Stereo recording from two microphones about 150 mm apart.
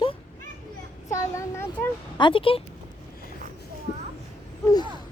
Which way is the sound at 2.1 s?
35° left (ahead or behind).